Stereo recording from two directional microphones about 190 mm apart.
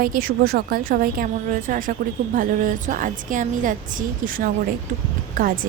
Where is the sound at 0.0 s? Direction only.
45° right (ahead or behind).